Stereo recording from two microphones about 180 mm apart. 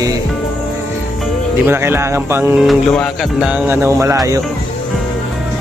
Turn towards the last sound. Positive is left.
turn(degrees=-15)  # may be behind; listen again after turning